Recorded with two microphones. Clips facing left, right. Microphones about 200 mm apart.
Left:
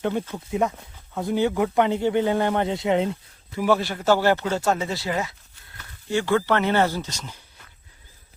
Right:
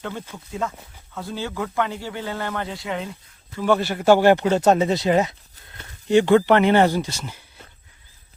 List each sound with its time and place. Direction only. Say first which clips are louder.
0.0 s speech: left 7 dB; 20° left (ahead or behind)
3.6 s a man's voice: right 1 dB; centre (ahead or behind)
4.0 s speech: right 7 dB; 15° right (ahead or behind)